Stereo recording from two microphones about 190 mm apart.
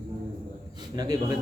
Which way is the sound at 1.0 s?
20° right (ahead or behind).